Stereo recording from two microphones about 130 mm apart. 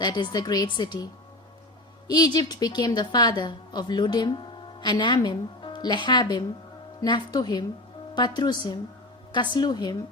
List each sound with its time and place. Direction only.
0.0 s a woman's voice: 35° left (ahead or behind)
2.0 s a woman's voice: 30° left (ahead or behind)